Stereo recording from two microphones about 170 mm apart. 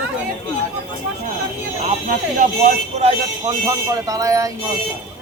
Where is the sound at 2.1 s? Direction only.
50° right (ahead or behind).